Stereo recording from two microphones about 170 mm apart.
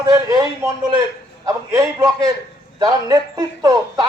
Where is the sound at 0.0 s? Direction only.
20° right (ahead or behind).